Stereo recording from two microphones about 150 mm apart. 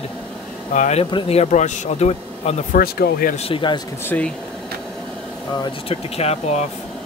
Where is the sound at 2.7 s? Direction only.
80° left.